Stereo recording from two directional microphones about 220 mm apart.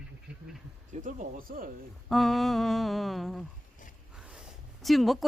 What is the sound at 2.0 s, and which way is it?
Mantra, centre (ahead or behind).